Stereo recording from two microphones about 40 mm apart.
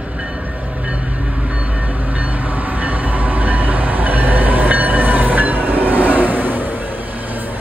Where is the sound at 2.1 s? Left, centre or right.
Right.